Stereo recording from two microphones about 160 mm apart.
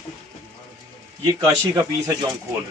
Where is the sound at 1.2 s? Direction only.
20° right (ahead or behind).